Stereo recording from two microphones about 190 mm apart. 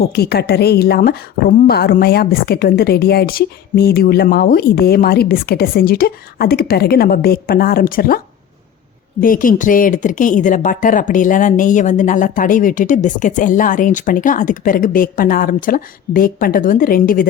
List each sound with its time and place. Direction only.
0.0 s speech: 55° left (ahead or behind)
9.2 s speech: 45° left (ahead or behind)